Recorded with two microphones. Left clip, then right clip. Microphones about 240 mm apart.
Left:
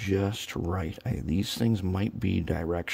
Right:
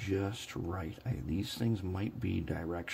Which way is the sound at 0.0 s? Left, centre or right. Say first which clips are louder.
Left 7 dB; left.